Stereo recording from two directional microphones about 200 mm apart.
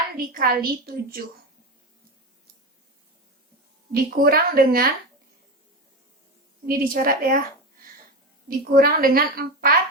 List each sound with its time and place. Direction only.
0.2 s a woman's voice: 45° right (ahead or behind)
3.9 s a woman's voice: 50° right (ahead or behind)
6.7 s a woman's voice: 45° right (ahead or behind)
8.4 s a woman's voice: 45° right (ahead or behind)